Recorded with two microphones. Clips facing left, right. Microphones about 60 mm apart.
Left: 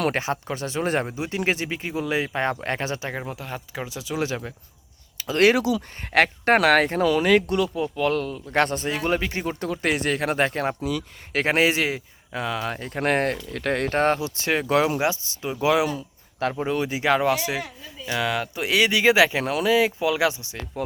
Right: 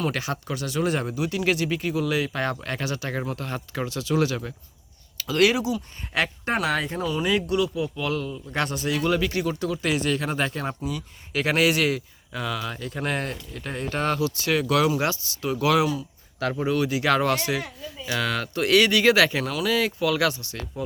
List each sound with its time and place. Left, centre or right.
0.1 s speech: left
3.2 s speech: centre
5.1 s a sound: left
5.5 s speech: left
6.1 s a man's voice: left
6.6 s speech: left
7.3 s a man's voice: left
11.3 s speech: left
12.6 s a man's voice: left
13.5 s speech: left
13.9 s speech: left
14.2 s speech: left
17.1 s speech: centre